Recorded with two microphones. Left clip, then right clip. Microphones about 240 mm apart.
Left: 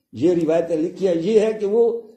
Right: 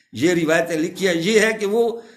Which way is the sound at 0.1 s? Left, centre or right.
Right.